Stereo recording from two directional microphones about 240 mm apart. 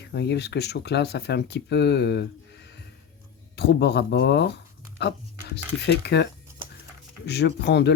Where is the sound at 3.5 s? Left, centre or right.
Left.